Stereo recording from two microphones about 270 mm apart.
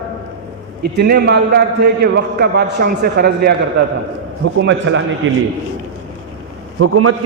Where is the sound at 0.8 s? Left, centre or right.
Right.